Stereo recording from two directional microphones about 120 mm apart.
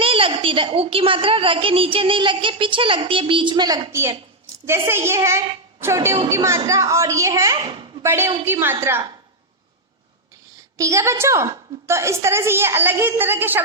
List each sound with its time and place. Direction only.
0.0 s a woman's voice: 50° right (ahead or behind)
4.6 s a woman's voice: 20° right (ahead or behind)
10.8 s a woman's voice: 25° right (ahead or behind)